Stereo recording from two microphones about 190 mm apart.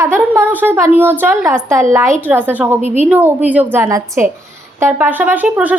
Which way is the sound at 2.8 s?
35° right (ahead or behind).